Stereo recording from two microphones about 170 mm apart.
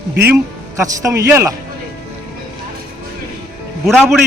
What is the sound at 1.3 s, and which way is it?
Speech, 15° right (ahead or behind).